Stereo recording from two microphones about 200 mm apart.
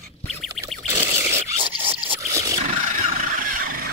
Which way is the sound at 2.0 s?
25° right (ahead or behind).